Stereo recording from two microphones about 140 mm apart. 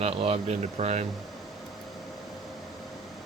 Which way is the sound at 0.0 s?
45° right (ahead or behind).